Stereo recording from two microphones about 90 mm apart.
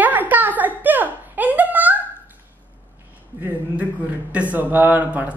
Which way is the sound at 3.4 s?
15° right (ahead or behind).